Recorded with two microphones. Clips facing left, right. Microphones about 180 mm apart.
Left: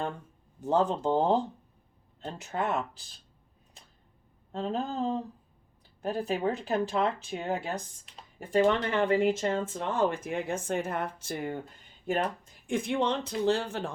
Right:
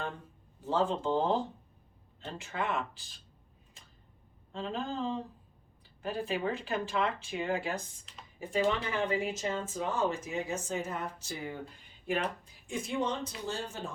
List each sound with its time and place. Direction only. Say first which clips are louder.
0.6 s speech: left 4 dB; 45° left (ahead or behind)
4.5 s speech: left 4 dB; 40° left (ahead or behind)
8.6 s speech: left 4 dB; 55° left (ahead or behind)